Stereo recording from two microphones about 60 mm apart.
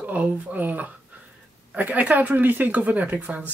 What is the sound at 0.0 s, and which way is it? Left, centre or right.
Speech, right.